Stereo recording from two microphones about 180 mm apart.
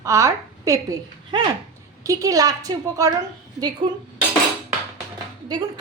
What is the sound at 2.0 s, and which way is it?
A woman's voice, 20° right (ahead or behind).